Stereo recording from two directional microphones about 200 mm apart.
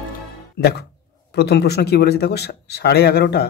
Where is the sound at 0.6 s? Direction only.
55° left (ahead or behind).